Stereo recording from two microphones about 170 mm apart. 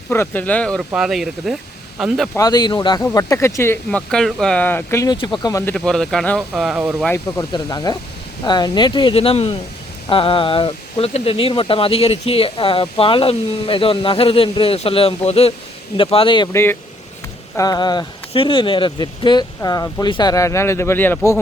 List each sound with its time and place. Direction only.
0.1 s speech: 10° left (ahead or behind)
2.3 s speech: 20° left (ahead or behind)
4.1 s speech: 5° left (ahead or behind)
5.1 s speech: 25° left (ahead or behind)
5.7 s speech: 5° left (ahead or behind)
7.0 s speech: 15° left (ahead or behind)
7.5 s speech: 25° left (ahead or behind)
16.5 s speech: 15° left (ahead or behind)